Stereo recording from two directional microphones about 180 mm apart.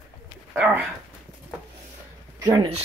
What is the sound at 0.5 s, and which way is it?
Speech, 5° right (ahead or behind).